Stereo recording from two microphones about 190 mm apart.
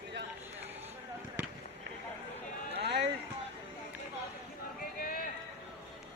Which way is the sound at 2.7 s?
65° right (ahead or behind).